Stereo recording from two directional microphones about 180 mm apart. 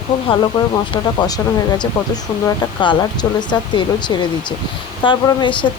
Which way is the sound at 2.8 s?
25° left (ahead or behind).